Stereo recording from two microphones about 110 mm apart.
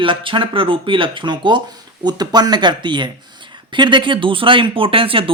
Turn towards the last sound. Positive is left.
turn(degrees=-55)  # may be behind; listen again after turning